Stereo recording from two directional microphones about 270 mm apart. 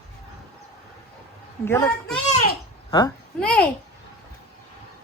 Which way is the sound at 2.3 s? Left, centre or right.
Left.